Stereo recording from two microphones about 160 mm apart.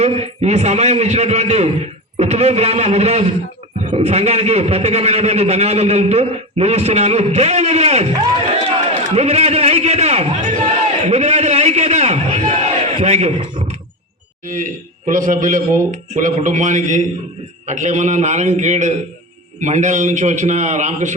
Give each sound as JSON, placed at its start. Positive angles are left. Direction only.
{"t": 0.0, "sound": "a man's voice", "side_deg": -40}
{"t": 8.5, "sound": "run", "side_deg": -40}
{"t": 9.1, "sound": "a sound", "side_deg": -40}
{"t": 13.4, "sound": "a man's voice", "side_deg": -30}
{"t": 14.4, "sound": "a man's voice", "side_deg": -60}